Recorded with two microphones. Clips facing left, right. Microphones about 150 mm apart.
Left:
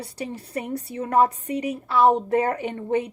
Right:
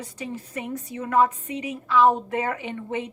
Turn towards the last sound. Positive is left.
turn(degrees=40)  # may be behind; listen again after turning